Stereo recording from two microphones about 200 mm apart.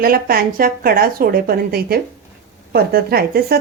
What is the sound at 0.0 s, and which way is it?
A woman's voice, 45° right (ahead or behind).